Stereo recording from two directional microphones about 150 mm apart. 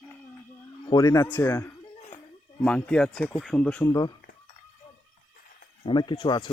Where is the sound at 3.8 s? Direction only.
25° left (ahead or behind).